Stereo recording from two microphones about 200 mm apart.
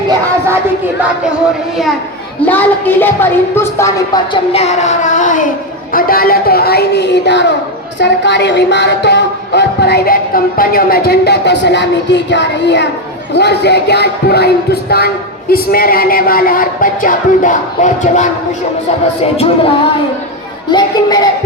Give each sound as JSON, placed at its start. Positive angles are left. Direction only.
{"t": 2.5, "sound": "a woman's voice", "side_deg": 10}
{"t": 4.5, "sound": "child singing", "side_deg": 35}
{"t": 5.9, "sound": "a woman's voice", "side_deg": 45}
{"t": 19.2, "sound": "child singing", "side_deg": 30}
{"t": 20.7, "sound": "speech", "side_deg": 20}